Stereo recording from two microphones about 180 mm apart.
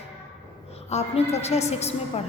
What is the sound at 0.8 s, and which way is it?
A woman's voice, 35° left (ahead or behind).